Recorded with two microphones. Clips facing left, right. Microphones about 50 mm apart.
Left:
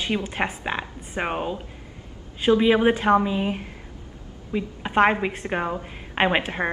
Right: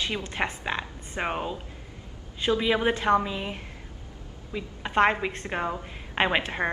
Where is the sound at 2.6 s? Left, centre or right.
Centre.